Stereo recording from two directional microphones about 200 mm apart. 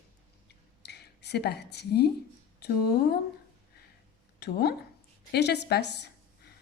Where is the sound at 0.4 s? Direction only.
55° left (ahead or behind).